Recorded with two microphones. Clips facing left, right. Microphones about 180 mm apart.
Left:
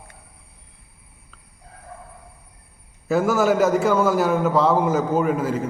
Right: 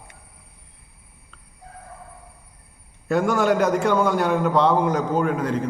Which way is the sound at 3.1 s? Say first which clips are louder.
Left 1 dB; 5° left (ahead or behind).